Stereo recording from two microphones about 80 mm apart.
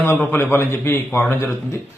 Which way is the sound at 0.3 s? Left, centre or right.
Left.